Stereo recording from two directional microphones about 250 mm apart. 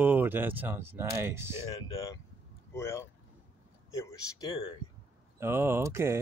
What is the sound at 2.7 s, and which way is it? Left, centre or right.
Speech, centre.